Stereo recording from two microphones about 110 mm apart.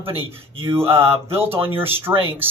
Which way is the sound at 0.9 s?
55° right (ahead or behind).